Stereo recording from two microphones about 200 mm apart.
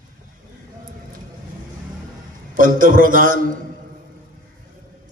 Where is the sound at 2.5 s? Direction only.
45° right (ahead or behind).